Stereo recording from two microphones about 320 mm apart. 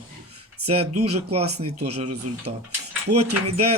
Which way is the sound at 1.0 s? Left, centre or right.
Centre.